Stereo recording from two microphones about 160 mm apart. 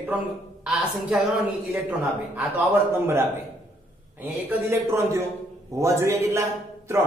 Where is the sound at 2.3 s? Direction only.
15° right (ahead or behind).